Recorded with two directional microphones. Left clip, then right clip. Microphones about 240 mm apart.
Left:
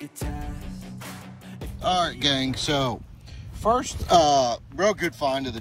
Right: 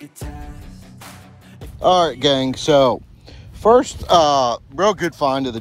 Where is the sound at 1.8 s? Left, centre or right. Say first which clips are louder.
Right 9 dB; centre.